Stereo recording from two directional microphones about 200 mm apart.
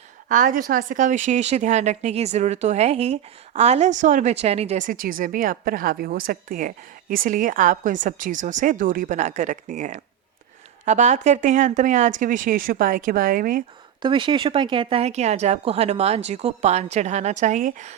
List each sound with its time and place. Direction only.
0.3 s a woman's voice: 40° right (ahead or behind)
14.0 s a woman's voice: 25° right (ahead or behind); by 17.9 s 40° right (ahead or behind)